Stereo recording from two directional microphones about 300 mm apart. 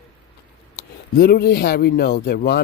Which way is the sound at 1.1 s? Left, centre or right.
Left.